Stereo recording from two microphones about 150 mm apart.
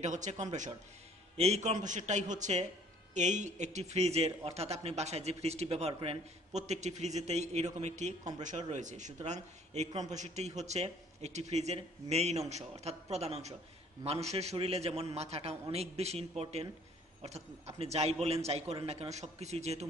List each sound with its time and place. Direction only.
0.0 s speech: 55° right (ahead or behind)